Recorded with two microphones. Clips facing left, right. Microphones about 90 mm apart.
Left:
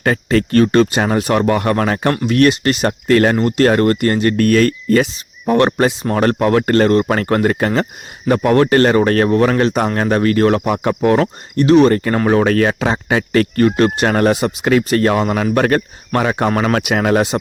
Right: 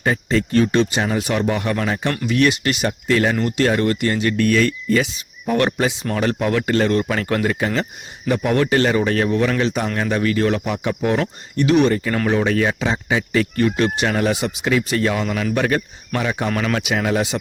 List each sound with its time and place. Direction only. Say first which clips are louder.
0.0 s speech: left 4 dB; 60° left (ahead or behind)
3.3 s speech: left 5 dB; 40° left (ahead or behind)
12.4 s speech: left 5 dB; 60° left (ahead or behind)
16.5 s speech: left 5 dB; 40° left (ahead or behind)